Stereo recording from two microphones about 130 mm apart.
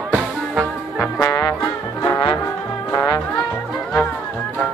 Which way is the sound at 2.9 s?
25° left (ahead or behind).